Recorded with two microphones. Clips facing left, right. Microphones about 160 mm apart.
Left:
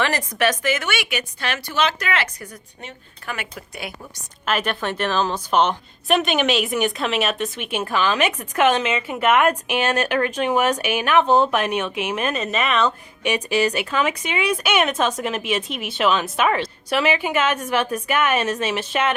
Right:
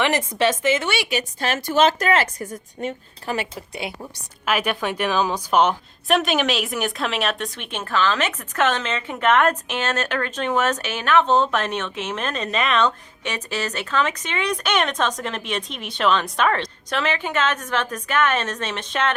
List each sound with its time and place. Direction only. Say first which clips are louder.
0.0 s a woman's voice: right 1 dB; 20° right (ahead or behind)
4.4 s a woman's voice: even; 10° right (ahead or behind); by 19.1 s 10° left (ahead or behind)